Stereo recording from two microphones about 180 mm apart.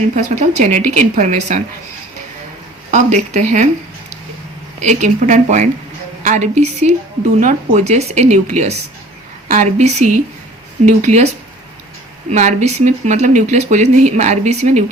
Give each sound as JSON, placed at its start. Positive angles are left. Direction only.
{"t": 0.3, "sound": "a woman's voice", "side_deg": -45}
{"t": 2.9, "sound": "speech", "side_deg": -40}
{"t": 4.8, "sound": "a woman's voice", "side_deg": -40}
{"t": 12.3, "sound": "speech", "side_deg": -40}